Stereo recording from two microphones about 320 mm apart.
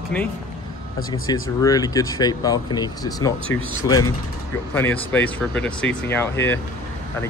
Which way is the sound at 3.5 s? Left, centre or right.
Left.